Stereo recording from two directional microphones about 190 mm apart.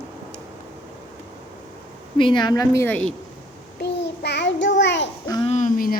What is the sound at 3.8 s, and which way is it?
Child singing, 60° left (ahead or behind).